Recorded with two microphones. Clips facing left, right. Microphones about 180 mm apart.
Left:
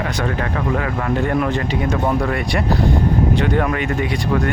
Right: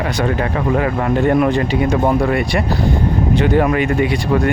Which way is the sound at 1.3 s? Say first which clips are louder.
Right 5 dB; 15° right (ahead or behind).